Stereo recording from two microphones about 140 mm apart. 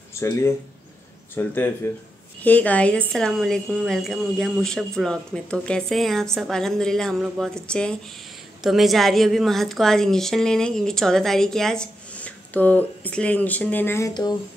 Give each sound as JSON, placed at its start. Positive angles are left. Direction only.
{"t": 0.1, "sound": "a woman's voice", "side_deg": 20}